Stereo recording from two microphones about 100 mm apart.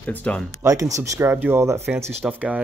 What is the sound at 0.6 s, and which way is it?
Speech, 35° right (ahead or behind).